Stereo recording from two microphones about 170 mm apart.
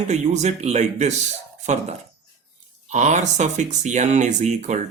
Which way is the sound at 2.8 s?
45° right (ahead or behind).